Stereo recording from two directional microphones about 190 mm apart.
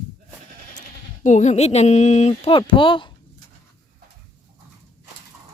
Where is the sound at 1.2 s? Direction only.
40° left (ahead or behind).